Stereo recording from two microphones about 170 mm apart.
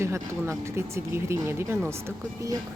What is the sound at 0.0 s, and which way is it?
Speech, 15° right (ahead or behind).